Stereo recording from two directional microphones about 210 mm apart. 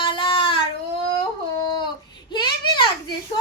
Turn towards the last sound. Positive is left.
turn(degrees=20)  # may be behind; listen again after turning